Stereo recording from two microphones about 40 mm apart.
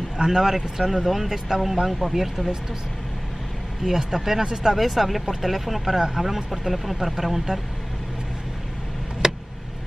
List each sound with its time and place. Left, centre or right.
0.2 s speech: centre
3.8 s speech: centre
4.7 s speech: centre
5.2 s speech: centre
9.2 s vehicle: centre